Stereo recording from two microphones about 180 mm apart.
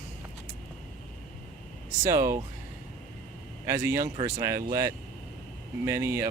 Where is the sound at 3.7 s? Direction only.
15° right (ahead or behind).